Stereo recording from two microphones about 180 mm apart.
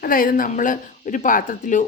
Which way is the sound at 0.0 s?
50° left (ahead or behind).